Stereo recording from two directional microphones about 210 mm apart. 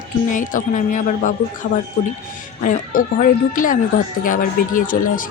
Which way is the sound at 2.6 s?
40° left (ahead or behind).